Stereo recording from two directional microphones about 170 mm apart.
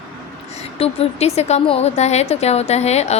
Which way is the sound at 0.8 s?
35° left (ahead or behind).